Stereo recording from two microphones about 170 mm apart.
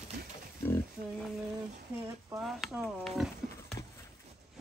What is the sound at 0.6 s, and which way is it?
Speech, 10° left (ahead or behind).